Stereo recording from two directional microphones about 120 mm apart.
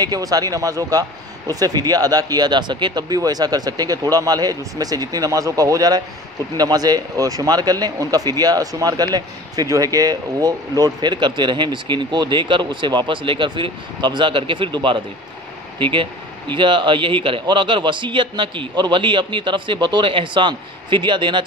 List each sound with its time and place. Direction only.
0.0 s speech: 30° right (ahead or behind)